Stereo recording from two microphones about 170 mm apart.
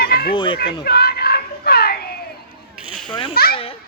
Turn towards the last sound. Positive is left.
turn(degrees=30)  # may be behind; listen again after turning